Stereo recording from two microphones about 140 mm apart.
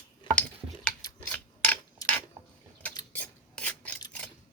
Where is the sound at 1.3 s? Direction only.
10° left (ahead or behind).